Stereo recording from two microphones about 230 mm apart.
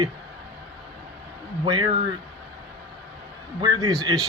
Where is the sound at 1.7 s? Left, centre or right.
Centre.